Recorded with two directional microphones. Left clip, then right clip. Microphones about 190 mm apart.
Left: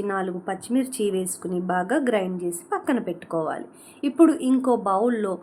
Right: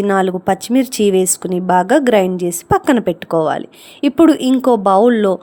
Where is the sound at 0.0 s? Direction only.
45° right (ahead or behind).